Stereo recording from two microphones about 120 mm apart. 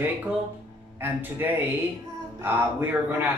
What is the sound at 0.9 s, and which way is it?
A man's voice, 15° right (ahead or behind).